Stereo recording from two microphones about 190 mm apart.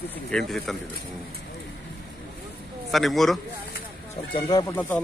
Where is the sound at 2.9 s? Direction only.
Centre (ahead or behind).